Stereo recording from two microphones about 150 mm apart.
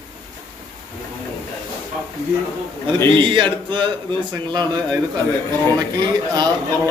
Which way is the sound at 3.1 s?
35° right (ahead or behind).